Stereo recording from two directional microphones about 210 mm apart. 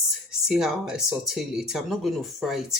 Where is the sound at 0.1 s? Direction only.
Centre (ahead or behind).